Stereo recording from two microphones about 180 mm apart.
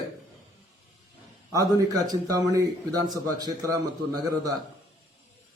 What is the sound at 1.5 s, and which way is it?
A man's voice, 20° right (ahead or behind).